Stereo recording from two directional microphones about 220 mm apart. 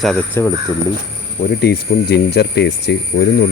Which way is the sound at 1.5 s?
45° left (ahead or behind).